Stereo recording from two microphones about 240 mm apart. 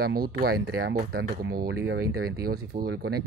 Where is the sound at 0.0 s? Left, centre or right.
Right.